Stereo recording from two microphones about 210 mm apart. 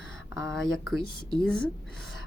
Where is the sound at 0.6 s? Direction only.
75° left (ahead or behind).